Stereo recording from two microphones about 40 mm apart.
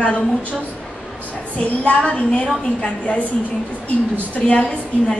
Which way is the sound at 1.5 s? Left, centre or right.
Left.